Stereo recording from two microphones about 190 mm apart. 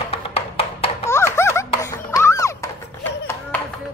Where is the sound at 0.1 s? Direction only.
30° left (ahead or behind).